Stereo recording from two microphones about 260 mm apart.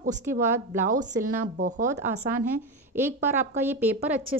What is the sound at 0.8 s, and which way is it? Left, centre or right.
Speech, right.